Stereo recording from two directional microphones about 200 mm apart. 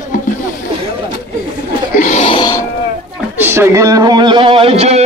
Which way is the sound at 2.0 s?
35° left (ahead or behind).